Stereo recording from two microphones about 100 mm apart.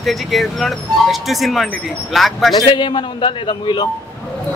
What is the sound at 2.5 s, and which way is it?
A man's voice, 50° left (ahead or behind).